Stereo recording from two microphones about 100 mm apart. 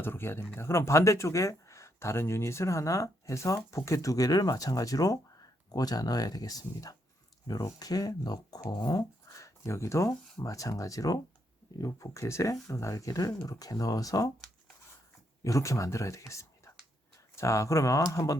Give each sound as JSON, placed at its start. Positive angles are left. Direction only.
{"t": 0.0, "sound": "speech", "side_deg": 25}
{"t": 15.4, "sound": "speech", "side_deg": 30}